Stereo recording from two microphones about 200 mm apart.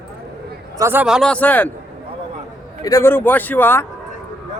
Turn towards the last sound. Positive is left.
turn(degrees=10)  # may be behind; listen again after turning